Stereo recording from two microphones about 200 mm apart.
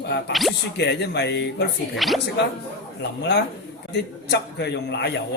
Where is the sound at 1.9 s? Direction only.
Centre (ahead or behind).